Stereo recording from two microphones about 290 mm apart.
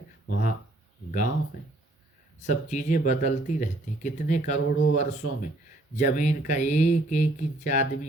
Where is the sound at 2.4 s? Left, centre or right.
Left.